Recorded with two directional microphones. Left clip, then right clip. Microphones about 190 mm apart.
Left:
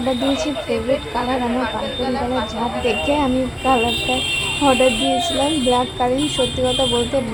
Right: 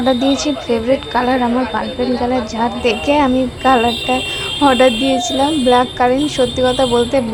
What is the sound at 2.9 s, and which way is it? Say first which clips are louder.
Speech: right 5 dB; 15° right (ahead or behind).